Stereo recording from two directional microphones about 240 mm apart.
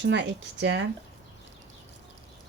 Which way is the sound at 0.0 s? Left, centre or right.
Right.